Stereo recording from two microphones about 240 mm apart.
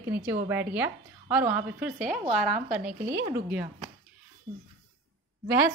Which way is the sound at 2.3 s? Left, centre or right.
Right.